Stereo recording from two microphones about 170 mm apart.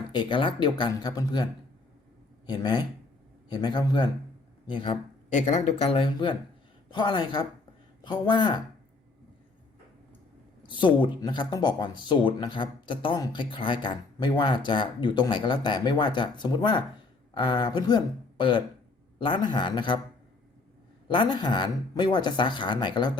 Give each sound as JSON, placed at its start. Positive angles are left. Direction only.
{"t": 0.1, "sound": "speech", "side_deg": 25}
{"t": 2.5, "sound": "speech", "side_deg": 25}
{"t": 5.3, "sound": "speech", "side_deg": 45}
{"t": 10.7, "sound": "speech", "side_deg": 30}
{"t": 21.1, "sound": "speech", "side_deg": 25}